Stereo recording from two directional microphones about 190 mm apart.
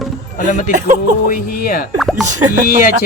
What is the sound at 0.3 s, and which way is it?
Speech, 45° left (ahead or behind).